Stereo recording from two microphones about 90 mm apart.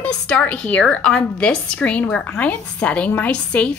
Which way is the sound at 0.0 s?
15° left (ahead or behind).